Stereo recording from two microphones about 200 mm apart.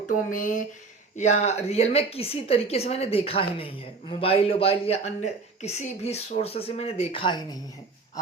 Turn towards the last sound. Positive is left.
turn(degrees=20)  # may be behind; listen again after turning